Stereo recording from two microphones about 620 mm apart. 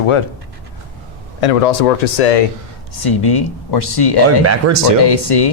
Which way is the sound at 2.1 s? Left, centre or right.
Left.